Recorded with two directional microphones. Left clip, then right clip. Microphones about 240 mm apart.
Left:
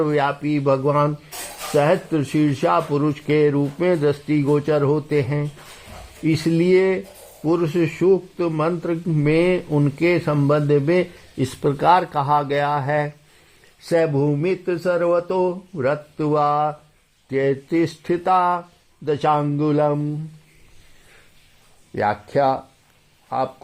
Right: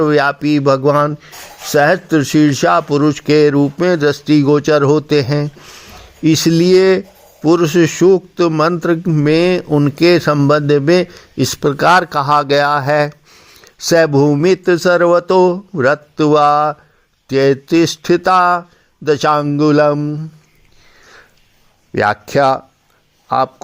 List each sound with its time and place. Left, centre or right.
0.0 s speech: right
21.9 s speech: right